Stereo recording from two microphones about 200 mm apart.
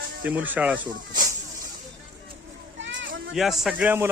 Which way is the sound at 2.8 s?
65° right (ahead or behind).